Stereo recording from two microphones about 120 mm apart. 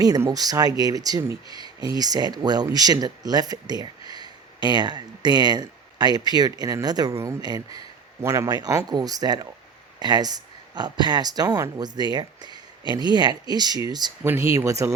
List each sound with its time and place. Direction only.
0.3 s speech: 30° right (ahead or behind)